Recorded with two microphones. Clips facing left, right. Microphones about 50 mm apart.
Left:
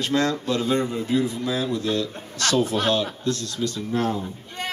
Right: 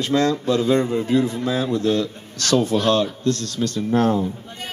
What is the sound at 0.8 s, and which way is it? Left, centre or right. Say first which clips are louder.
A man's voice: right 4 dB; right.